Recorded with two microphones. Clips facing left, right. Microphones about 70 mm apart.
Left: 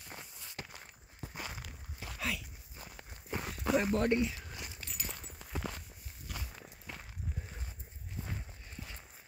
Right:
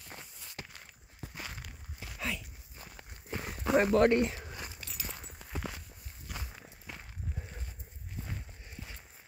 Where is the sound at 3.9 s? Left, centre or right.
Right.